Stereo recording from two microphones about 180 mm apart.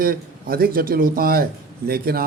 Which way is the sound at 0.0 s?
55° right (ahead or behind).